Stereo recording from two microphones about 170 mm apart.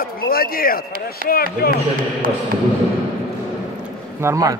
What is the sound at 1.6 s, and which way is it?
Speech, 60° left (ahead or behind).